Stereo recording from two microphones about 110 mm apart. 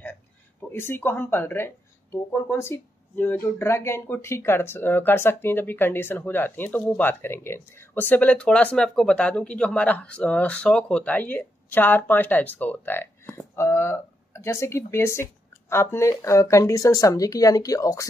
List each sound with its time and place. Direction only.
0.0 s speech: 15° left (ahead or behind)